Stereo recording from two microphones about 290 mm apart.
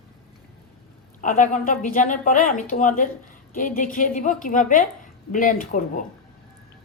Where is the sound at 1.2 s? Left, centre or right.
Left.